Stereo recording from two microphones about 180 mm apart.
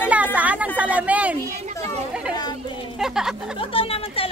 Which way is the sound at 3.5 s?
30° left (ahead or behind).